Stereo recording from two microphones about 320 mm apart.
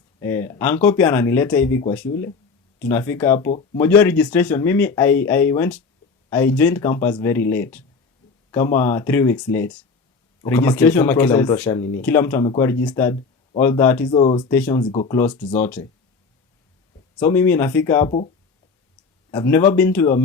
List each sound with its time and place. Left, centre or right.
0.2 s speech: centre
14.1 s speech: centre
15.5 s speech: centre
17.2 s speech: centre
19.3 s speech: centre